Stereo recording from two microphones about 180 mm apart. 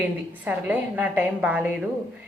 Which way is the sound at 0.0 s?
10° right (ahead or behind).